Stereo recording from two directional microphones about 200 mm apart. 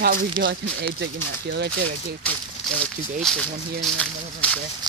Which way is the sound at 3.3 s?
Centre (ahead or behind).